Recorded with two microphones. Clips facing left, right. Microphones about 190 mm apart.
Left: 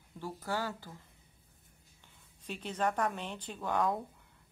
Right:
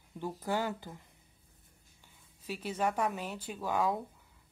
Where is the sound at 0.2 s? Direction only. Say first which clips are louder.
Right 3 dB; 20° right (ahead or behind).